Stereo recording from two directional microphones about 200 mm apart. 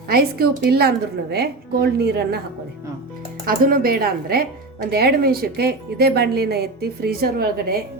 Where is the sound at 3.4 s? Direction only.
45° right (ahead or behind).